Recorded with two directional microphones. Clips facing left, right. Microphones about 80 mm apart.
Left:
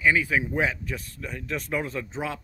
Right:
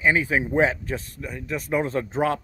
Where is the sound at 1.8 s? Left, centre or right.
Right.